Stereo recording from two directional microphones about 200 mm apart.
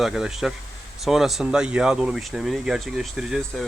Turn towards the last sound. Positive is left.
turn(degrees=0)  # may be behind; listen again after turning